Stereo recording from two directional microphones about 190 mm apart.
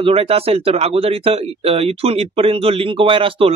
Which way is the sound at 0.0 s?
30° right (ahead or behind).